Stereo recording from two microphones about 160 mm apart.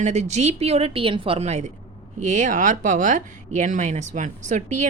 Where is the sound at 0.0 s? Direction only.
45° right (ahead or behind).